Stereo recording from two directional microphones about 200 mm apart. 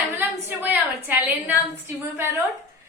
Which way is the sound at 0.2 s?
10° right (ahead or behind).